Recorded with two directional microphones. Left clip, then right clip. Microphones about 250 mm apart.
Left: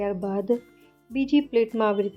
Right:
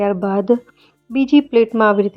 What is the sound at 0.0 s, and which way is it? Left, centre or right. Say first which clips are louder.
A woman's voice: right 10 dB; centre.